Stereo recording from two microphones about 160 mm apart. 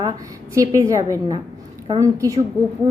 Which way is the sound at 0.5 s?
20° right (ahead or behind).